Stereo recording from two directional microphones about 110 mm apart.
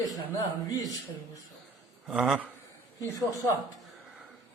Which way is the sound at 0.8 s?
30° left (ahead or behind).